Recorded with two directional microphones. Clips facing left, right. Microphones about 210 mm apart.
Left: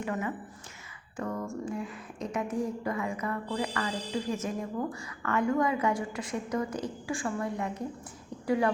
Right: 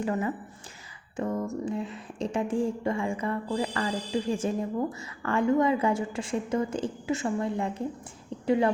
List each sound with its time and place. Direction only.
0.0 s a woman's voice: 30° right (ahead or behind)